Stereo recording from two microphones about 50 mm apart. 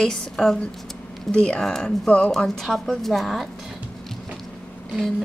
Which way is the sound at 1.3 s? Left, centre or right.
Centre.